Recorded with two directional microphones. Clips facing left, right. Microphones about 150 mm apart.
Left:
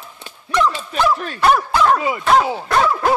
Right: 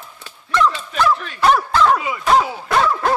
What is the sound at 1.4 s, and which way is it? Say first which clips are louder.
Speech: even; 5° left (ahead or behind).